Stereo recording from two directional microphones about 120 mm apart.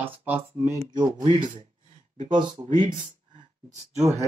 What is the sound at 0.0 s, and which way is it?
Speech, 15° right (ahead or behind).